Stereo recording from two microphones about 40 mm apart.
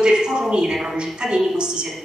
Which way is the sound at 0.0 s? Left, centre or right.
Centre.